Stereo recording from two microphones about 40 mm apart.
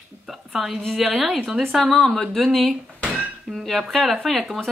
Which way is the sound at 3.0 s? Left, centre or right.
Right.